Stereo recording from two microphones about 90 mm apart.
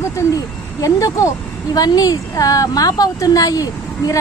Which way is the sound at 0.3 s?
40° left (ahead or behind).